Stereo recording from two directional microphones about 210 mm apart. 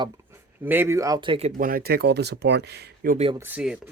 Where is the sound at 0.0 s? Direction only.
10° right (ahead or behind); by 3.2 s 45° right (ahead or behind).